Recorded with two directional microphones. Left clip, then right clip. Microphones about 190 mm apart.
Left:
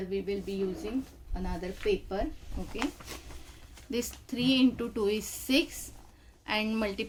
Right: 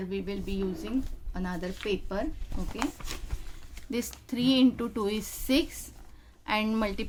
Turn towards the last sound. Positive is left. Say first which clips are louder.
# right 1 dB
turn(degrees=-25)  # may be behind; listen again after turning